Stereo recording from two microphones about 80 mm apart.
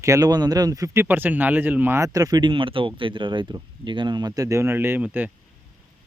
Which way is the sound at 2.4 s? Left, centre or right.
Right.